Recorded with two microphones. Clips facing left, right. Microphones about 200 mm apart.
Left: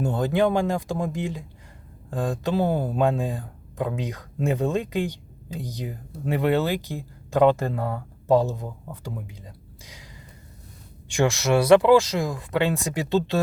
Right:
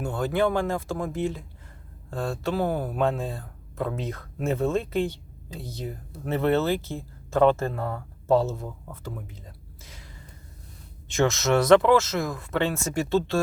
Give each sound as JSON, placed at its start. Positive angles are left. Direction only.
{"t": 0.0, "sound": "speech", "side_deg": 20}
{"t": 11.1, "sound": "speech", "side_deg": 15}